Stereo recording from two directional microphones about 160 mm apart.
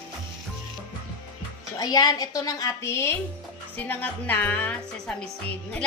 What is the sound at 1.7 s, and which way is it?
A woman's voice, 25° left (ahead or behind).